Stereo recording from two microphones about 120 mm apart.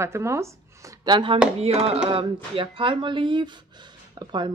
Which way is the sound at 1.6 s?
60° right (ahead or behind).